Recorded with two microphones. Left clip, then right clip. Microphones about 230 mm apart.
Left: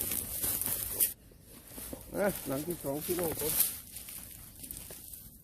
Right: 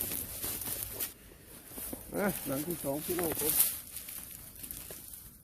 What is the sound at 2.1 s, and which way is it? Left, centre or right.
Speech, right.